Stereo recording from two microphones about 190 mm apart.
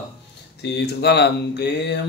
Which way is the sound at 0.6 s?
60° left (ahead or behind).